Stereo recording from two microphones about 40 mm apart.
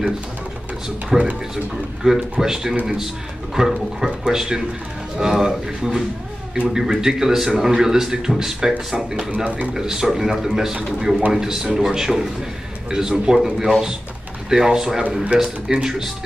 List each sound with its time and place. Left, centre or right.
1.1 s speech: centre